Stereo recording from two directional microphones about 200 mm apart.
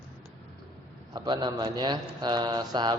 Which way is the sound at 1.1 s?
20° right (ahead or behind).